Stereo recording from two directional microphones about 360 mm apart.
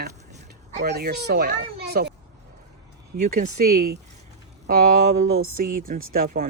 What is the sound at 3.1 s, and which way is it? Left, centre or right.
Speech, right.